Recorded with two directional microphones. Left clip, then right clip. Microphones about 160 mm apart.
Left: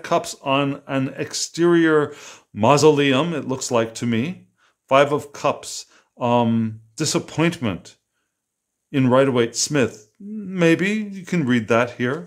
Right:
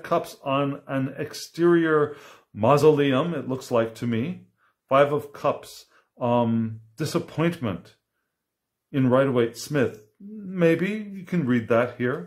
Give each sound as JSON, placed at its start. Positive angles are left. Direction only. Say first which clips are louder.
{"t": 0.0, "sound": "speech", "louder": "left 4 dB", "side_deg": 30}
{"t": 8.9, "sound": "speech", "louder": "left 4 dB", "side_deg": 35}